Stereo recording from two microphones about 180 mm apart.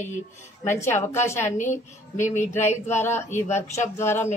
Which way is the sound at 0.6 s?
15° left (ahead or behind).